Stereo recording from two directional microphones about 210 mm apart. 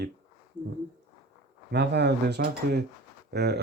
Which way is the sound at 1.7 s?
55° right (ahead or behind).